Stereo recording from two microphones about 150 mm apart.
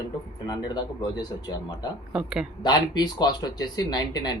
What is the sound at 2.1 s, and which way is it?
Speech, 5° right (ahead or behind).